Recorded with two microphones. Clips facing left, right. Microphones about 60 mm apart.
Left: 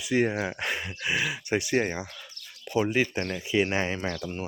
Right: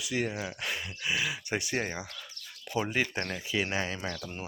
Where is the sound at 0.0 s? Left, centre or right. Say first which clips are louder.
Left 7 dB; left.